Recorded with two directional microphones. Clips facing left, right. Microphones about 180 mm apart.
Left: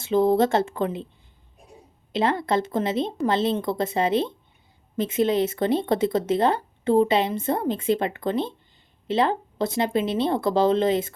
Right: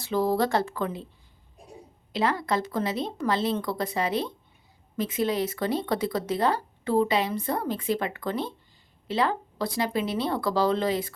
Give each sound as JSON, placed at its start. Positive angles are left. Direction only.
{"t": 0.0, "sound": "speech", "side_deg": 20}
{"t": 2.1, "sound": "speech", "side_deg": 25}